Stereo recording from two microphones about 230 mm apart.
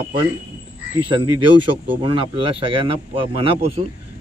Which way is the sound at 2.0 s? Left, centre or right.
Right.